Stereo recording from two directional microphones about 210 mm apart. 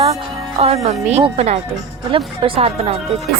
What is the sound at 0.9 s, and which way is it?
A woman's voice, 30° right (ahead or behind).